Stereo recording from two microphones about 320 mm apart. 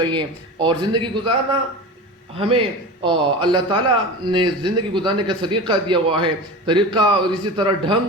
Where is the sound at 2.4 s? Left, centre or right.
Centre.